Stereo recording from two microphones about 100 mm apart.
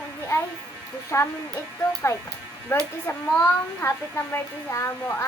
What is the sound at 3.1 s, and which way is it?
Speech, 25° left (ahead or behind).